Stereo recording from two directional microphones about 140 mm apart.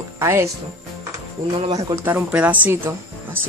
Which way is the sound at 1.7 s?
25° right (ahead or behind).